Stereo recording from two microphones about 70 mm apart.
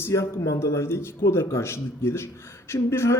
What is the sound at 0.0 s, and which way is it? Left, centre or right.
A man's voice, left.